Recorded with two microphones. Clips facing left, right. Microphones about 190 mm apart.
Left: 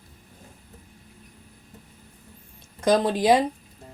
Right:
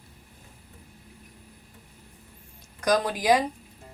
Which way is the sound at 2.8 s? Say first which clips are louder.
Left 4 dB; 25° left (ahead or behind).